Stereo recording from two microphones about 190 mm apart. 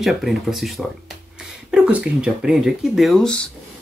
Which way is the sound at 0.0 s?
Centre (ahead or behind).